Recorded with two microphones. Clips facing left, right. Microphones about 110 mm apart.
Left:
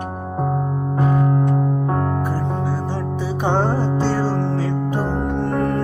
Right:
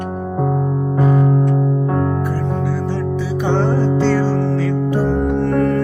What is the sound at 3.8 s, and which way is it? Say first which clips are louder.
Music: right 5 dB; 15° left (ahead or behind).